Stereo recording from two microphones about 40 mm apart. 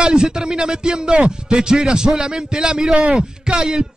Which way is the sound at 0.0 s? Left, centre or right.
Right.